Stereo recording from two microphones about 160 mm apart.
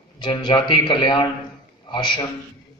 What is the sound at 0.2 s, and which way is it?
A man's voice, 30° left (ahead or behind).